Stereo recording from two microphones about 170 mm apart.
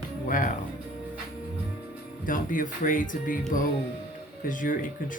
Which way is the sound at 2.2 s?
55° left (ahead or behind).